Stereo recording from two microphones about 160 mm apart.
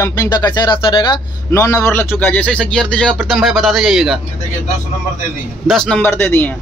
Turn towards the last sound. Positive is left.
turn(degrees=15)  # may be behind; listen again after turning